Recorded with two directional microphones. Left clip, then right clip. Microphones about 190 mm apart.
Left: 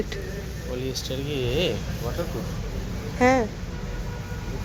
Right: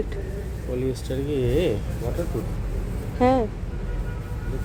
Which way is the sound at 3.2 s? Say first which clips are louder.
Even; 15° right (ahead or behind).